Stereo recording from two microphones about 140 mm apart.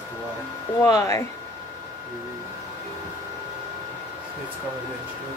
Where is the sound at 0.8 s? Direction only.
25° left (ahead or behind).